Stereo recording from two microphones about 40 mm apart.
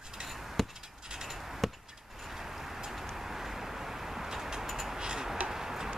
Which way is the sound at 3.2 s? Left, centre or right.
Centre.